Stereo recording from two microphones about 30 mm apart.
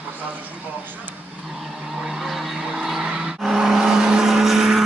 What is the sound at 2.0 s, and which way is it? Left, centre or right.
Vehicle, centre.